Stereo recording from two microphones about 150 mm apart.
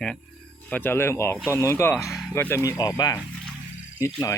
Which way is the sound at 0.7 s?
15° left (ahead or behind).